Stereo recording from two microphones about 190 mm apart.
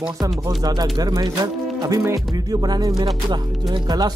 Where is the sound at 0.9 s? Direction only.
20° right (ahead or behind).